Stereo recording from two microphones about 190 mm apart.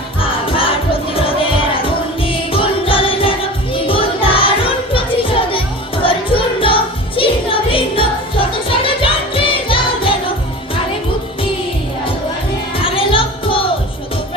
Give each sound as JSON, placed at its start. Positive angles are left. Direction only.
{"t": 0.2, "sound": "music", "side_deg": 30}
{"t": 12.8, "sound": "music", "side_deg": 30}